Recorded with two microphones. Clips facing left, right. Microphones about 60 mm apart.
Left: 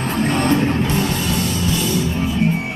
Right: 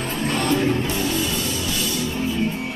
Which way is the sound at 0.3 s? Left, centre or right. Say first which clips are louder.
Left 2 dB; left.